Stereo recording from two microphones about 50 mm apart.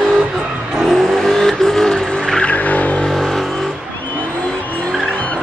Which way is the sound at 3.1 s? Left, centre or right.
Centre.